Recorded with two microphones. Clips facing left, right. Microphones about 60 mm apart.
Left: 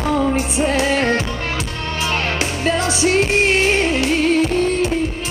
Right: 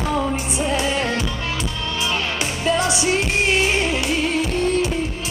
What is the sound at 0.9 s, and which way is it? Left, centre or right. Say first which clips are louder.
Music: left 5 dB; left.